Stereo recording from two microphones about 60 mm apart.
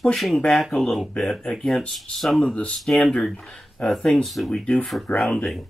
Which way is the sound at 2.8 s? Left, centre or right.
Centre.